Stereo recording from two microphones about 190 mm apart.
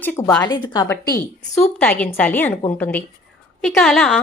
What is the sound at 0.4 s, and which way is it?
A woman's voice, 25° left (ahead or behind).